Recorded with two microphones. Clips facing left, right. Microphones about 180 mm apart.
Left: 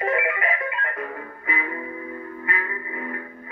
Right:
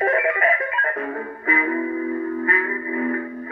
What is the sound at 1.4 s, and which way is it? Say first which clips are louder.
Music: right 8 dB; 55° right (ahead or behind).